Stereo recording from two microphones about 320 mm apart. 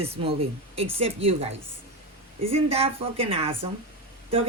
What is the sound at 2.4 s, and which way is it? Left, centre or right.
Speech, centre.